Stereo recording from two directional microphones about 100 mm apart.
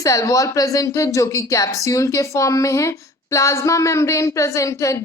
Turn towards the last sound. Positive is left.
turn(degrees=30)  # may be behind; listen again after turning